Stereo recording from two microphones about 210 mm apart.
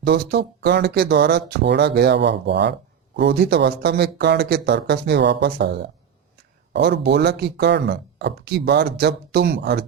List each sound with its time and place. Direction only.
0.0 s speech: 50° right (ahead or behind)